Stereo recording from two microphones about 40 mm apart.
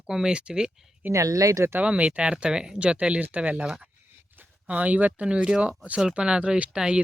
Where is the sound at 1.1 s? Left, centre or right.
Right.